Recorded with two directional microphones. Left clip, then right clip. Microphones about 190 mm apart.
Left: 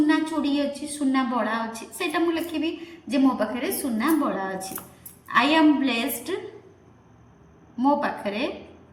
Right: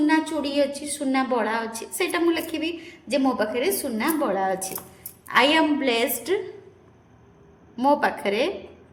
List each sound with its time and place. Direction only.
0.1 s a sound: 55° right (ahead or behind)
1.1 s a woman's voice: 50° right (ahead or behind)
7.8 s a woman's voice: 60° right (ahead or behind)